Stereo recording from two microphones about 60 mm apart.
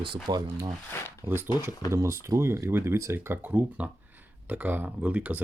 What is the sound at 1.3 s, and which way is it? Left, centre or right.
Speech, right.